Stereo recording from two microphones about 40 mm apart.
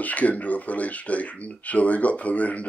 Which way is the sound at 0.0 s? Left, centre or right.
Left.